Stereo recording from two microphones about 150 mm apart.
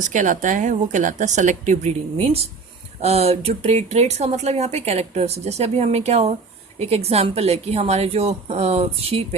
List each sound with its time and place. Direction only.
0.0 s speech: 55° right (ahead or behind)